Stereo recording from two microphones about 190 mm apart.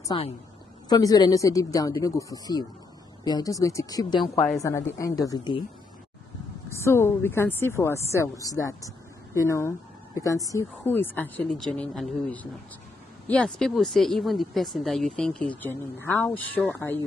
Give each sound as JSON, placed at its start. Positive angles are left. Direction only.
{"t": 0.1, "sound": "speech", "side_deg": 25}
{"t": 4.2, "sound": "speech", "side_deg": 0}
{"t": 4.6, "sound": "speech", "side_deg": 15}
{"t": 6.7, "sound": "speech", "side_deg": 15}